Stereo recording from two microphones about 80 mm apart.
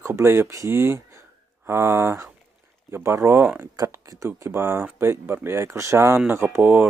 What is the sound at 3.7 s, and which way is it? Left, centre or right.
Speech, right.